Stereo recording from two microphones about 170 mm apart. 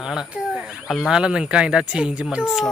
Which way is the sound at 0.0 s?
5° right (ahead or behind).